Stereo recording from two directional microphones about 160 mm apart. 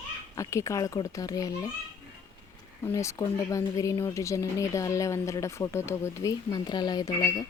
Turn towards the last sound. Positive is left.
turn(degrees=25)  # may be behind; listen again after turning